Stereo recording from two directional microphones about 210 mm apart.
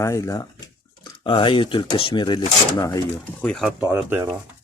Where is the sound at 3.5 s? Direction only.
Centre (ahead or behind).